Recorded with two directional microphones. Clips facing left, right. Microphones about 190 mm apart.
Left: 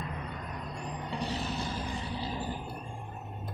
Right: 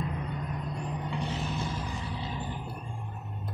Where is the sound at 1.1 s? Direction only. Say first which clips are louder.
Left 2 dB; 35° left (ahead or behind).